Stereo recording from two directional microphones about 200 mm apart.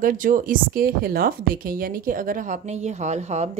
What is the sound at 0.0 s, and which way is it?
A woman's voice, 40° right (ahead or behind).